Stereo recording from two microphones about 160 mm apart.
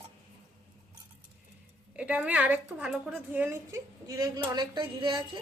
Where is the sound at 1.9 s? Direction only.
10° right (ahead or behind); by 5.4 s 30° right (ahead or behind).